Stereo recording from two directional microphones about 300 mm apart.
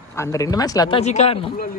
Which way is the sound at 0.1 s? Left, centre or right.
Centre.